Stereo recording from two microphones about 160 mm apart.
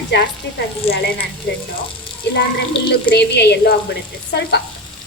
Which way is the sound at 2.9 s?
90° left.